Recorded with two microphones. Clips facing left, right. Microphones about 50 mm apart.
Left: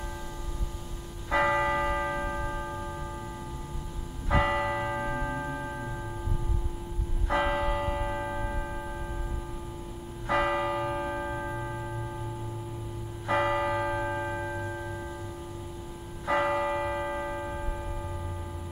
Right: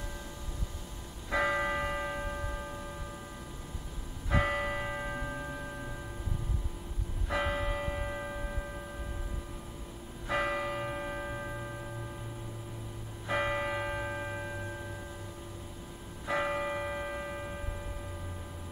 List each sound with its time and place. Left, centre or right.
1.3 s church bell: left
4.3 s church bell: left
4.7 s tubular bells: centre
7.2 s church bell: left
7.9 s church bell: left
10.2 s church bell: left
11.1 s church bell: centre
13.3 s church bell: left
13.6 s church bell: centre
16.3 s church bell: left
16.7 s a sound: left
17.0 s a sound: centre